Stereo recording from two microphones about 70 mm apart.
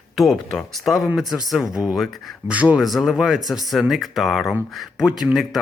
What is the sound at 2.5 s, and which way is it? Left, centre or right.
Speech, centre.